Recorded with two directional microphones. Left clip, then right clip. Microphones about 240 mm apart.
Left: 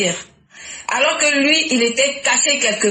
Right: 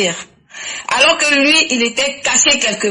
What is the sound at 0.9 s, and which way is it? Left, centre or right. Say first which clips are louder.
Speech: right 4 dB; right.